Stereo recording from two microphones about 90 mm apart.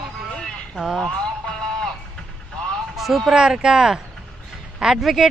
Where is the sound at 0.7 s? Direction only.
5° right (ahead or behind).